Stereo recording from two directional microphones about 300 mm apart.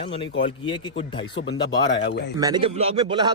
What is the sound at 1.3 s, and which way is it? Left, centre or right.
Speech, left.